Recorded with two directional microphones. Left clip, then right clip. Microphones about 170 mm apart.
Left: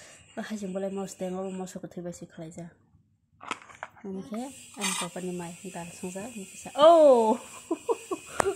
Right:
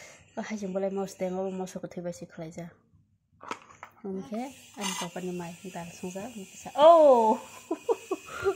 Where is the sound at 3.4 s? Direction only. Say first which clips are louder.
Left 3 dB; 40° left (ahead or behind).